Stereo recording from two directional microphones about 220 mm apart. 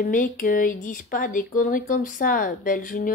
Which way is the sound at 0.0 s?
40° left (ahead or behind).